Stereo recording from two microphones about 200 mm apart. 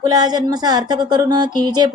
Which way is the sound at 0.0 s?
20° right (ahead or behind).